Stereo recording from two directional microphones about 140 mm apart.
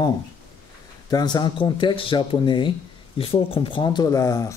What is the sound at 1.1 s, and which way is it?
Speech, 30° left (ahead or behind).